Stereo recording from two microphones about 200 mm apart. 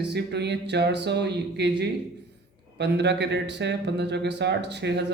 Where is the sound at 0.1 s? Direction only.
55° right (ahead or behind).